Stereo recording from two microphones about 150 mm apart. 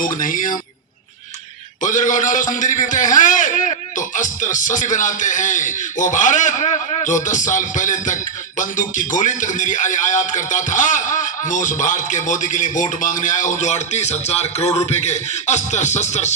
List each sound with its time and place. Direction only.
0.0 s music: 65° left (ahead or behind)
1.8 s music: 60° left (ahead or behind)